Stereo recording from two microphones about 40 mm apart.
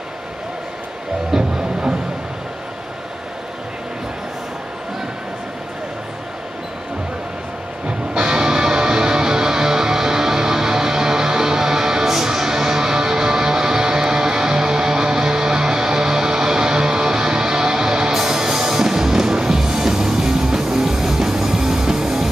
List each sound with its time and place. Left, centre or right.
1.3 s music: centre
8.1 s music: right